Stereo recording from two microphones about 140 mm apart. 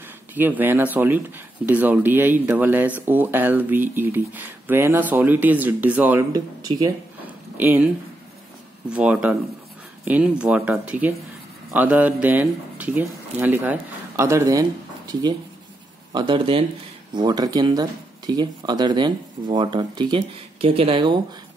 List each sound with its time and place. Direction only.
0.3 s speech: 15° right (ahead or behind)
6.3 s speech: 25° right (ahead or behind)
7.5 s speech: 10° right (ahead or behind)
8.9 s speech: 10° right (ahead or behind); by 16.6 s 40° right (ahead or behind)
17.1 s speech: 30° right (ahead or behind)